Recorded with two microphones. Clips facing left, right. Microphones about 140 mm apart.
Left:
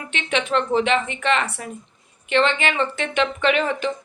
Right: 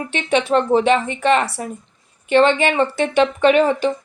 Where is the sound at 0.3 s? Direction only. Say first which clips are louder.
Right 5 dB; 35° right (ahead or behind).